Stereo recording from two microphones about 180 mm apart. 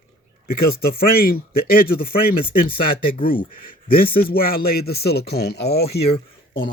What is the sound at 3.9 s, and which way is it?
Speech, 55° left (ahead or behind).